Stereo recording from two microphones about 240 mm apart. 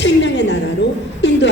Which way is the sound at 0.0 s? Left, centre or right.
Left.